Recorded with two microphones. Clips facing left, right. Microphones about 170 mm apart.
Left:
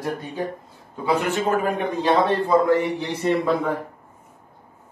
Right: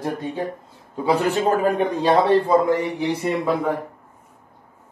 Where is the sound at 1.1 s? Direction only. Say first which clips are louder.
Right 2 dB; 35° right (ahead or behind).